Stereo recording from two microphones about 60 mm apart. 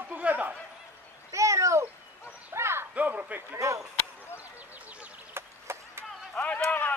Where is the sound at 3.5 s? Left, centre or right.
Right.